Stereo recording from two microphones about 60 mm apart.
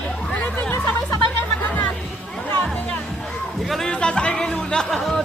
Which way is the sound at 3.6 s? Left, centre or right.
Centre.